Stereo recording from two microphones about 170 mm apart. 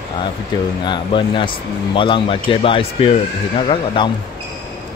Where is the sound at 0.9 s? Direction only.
30° left (ahead or behind).